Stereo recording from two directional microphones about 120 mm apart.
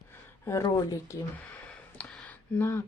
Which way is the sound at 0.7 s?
25° left (ahead or behind).